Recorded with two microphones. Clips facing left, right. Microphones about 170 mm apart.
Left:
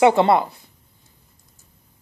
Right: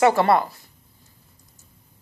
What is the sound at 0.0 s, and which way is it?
Speech, 20° left (ahead or behind).